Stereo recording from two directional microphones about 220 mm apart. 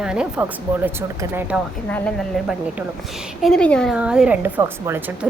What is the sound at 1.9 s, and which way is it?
A woman's voice, 5° left (ahead or behind).